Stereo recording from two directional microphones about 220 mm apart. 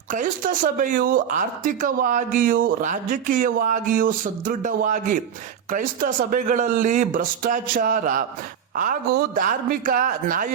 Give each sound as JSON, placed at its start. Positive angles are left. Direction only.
{"t": 0.1, "sound": "speech", "side_deg": -35}